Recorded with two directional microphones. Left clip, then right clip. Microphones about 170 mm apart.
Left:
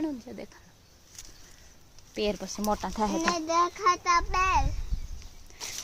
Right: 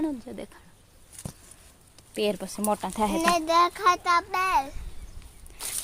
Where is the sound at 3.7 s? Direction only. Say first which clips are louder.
Right 3 dB; 15° right (ahead or behind).